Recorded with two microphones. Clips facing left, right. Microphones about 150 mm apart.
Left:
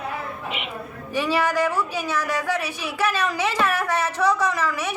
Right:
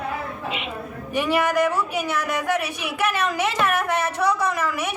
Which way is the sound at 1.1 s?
15° right (ahead or behind).